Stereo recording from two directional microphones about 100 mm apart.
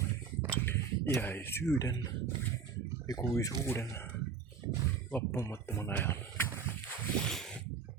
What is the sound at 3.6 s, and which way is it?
Speech, 25° left (ahead or behind).